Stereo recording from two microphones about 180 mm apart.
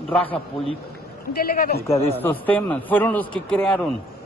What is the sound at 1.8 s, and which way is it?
Speech, 35° left (ahead or behind).